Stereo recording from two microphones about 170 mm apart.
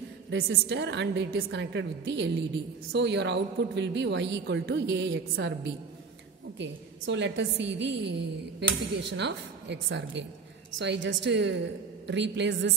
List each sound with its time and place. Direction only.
0.3 s a woman's voice: 90° right